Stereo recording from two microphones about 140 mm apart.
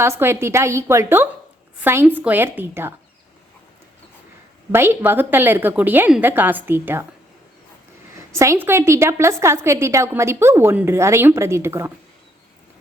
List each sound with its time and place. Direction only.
0.0 s a woman's voice: 20° right (ahead or behind)
4.7 s a woman's voice: 15° right (ahead or behind)
8.3 s a woman's voice: 20° right (ahead or behind)